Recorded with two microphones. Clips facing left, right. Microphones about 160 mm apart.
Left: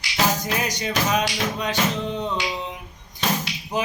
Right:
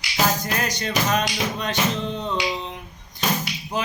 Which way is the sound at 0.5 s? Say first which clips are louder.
Even; 10° left (ahead or behind).